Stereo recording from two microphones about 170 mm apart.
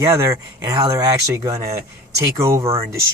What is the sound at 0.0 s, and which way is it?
Speech, 15° right (ahead or behind).